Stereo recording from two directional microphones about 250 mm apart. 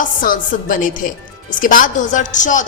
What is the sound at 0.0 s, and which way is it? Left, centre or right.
Speech, left.